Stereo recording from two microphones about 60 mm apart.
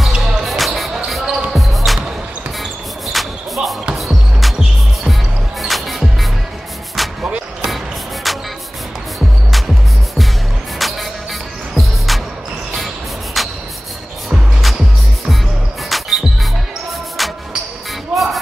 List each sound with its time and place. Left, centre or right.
0.0 s basketball bounce: centre
3.1 s music: centre
10.8 s music: centre
12.1 s music: centre
12.7 s a sound: centre
14.3 s music: centre
15.9 s music: centre
18.1 s a sound: centre